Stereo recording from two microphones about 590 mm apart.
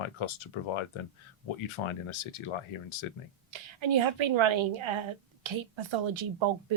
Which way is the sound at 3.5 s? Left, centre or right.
Right.